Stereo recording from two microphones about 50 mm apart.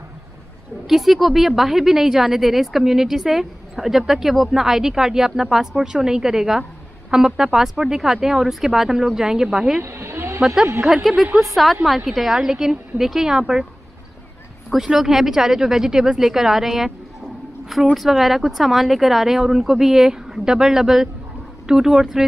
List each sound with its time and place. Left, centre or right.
0.8 s a woman's voice: centre
9.8 s a sound: right
10.4 s a woman's voice: centre
14.9 s a woman's voice: centre
17.9 s a woman's voice: centre